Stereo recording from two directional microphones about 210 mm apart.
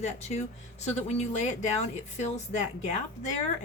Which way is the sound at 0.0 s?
30° left (ahead or behind).